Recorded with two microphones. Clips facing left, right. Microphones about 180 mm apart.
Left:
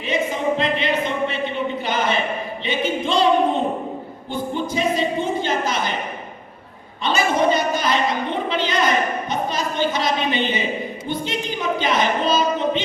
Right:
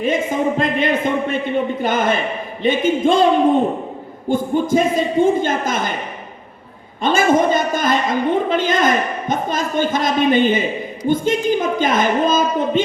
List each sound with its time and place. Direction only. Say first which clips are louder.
0.0 s a man's voice: right 4 dB; 45° right (ahead or behind)
4.3 s a man's voice: right 8 dB; 50° right (ahead or behind)
7.0 s a man's voice: right 4 dB; 50° right (ahead or behind)